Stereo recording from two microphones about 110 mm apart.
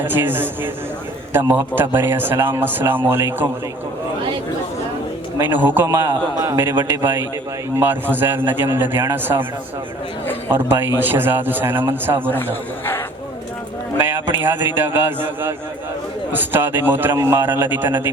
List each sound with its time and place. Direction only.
0.0 s a man's voice: 20° right (ahead or behind)
5.4 s a man's voice: 20° right (ahead or behind)
10.5 s a man's voice: 20° right (ahead or behind)
14.0 s a man's voice: 20° right (ahead or behind)